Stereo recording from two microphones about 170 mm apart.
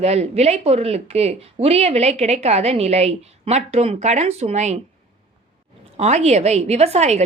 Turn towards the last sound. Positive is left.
turn(degrees=-40)  # may be behind; listen again after turning